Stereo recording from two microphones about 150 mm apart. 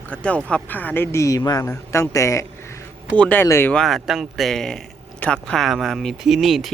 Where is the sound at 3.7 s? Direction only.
Centre (ahead or behind).